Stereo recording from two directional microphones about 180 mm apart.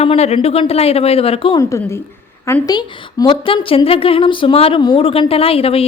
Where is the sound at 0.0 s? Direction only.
35° left (ahead or behind).